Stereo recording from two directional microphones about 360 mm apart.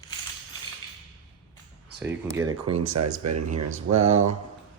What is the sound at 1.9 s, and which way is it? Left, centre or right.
Speech, centre.